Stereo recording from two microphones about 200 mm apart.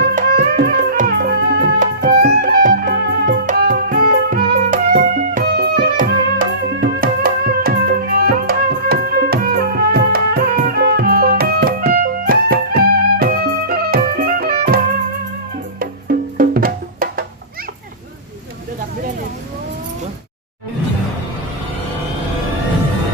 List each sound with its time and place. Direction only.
0.0 s music: 50° right (ahead or behind)
15.8 s music: 45° right (ahead or behind)